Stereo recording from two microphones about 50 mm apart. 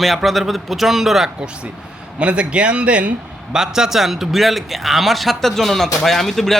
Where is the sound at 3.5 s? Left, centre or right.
Centre.